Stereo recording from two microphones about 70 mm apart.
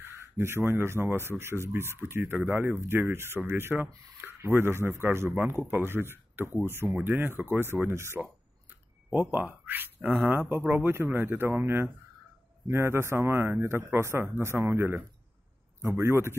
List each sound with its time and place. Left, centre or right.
0.0 s speech: right
9.1 s speech: right